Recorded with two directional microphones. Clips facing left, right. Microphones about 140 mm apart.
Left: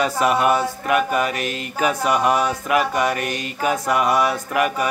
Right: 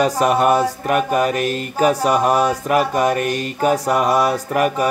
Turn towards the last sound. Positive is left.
turn(degrees=-40)  # may be behind; listen again after turning